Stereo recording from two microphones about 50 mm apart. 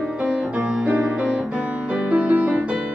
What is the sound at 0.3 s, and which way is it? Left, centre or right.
Music, right.